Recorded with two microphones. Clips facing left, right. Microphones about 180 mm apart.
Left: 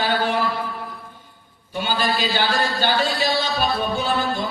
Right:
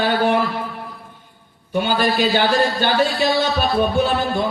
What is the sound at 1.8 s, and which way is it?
A man's voice, 55° right (ahead or behind).